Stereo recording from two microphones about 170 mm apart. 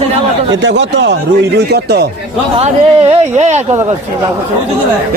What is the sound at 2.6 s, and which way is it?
Speech, 40° right (ahead or behind).